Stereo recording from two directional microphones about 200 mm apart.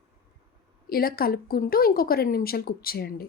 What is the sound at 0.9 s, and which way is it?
A woman's voice, 50° left (ahead or behind).